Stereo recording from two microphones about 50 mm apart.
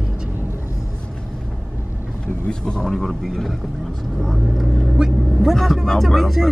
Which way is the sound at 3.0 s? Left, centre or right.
Centre.